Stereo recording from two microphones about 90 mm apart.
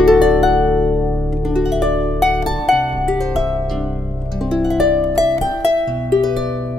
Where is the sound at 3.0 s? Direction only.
Centre (ahead or behind).